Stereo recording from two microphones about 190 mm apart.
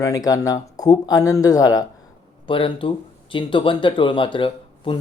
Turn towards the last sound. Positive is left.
turn(degrees=30)  # may be behind; listen again after turning